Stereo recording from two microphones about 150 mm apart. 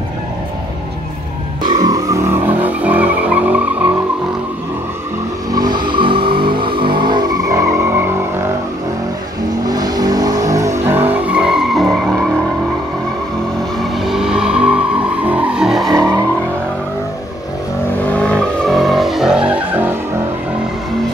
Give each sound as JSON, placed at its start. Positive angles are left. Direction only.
{"t": 1.7, "sound": "vehicle", "side_deg": -25}
{"t": 5.5, "sound": "vehicle", "side_deg": -25}
{"t": 9.7, "sound": "vehicle", "side_deg": -25}
{"t": 13.9, "sound": "vehicle", "side_deg": -5}
{"t": 16.0, "sound": "vehicle", "side_deg": -25}
{"t": 18.1, "sound": "vehicle", "side_deg": 5}